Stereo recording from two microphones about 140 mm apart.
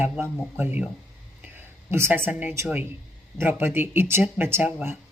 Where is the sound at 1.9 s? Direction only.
15° right (ahead or behind).